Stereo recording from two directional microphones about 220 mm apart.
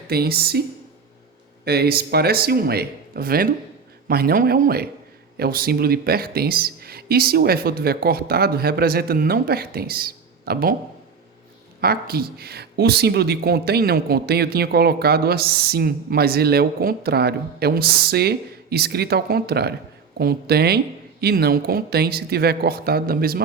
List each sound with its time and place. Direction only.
0.1 s speech: 45° right (ahead or behind)
1.6 s speech: 45° right (ahead or behind)
11.8 s speech: 45° right (ahead or behind)